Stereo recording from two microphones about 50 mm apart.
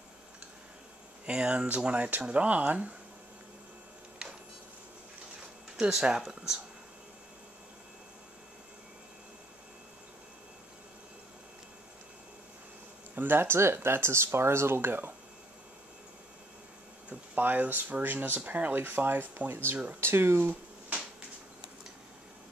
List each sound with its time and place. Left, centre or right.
1.2 s speech: right
4.2 s a sound: centre
5.8 s speech: centre
13.1 s speech: right
17.1 s speech: right
20.0 s speech: right